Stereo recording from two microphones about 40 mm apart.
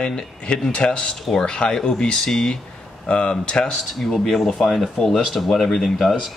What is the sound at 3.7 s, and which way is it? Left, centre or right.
Speech, centre.